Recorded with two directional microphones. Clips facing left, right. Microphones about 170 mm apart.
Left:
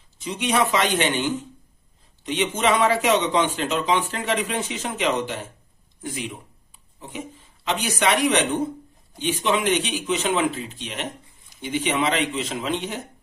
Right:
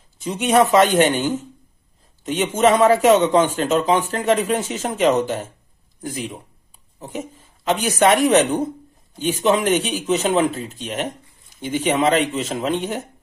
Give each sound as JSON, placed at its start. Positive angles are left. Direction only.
{"t": 0.2, "sound": "a man's voice", "side_deg": -45}
{"t": 7.0, "sound": "a man's voice", "side_deg": -45}